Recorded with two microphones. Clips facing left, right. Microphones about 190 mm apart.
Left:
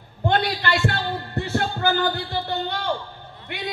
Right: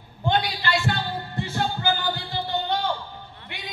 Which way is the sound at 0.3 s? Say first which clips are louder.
Left 2 dB; 55° left (ahead or behind).